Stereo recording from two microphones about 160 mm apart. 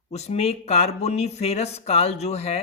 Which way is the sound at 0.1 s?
40° left (ahead or behind).